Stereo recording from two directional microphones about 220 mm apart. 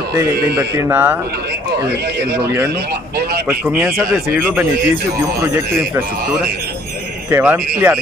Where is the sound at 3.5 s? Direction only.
5° right (ahead or behind).